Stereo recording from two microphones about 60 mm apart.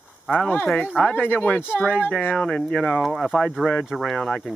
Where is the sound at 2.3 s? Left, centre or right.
Centre.